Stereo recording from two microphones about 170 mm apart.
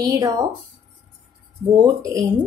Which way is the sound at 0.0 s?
25° right (ahead or behind).